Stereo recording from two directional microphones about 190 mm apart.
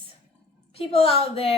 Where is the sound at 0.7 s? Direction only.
30° left (ahead or behind).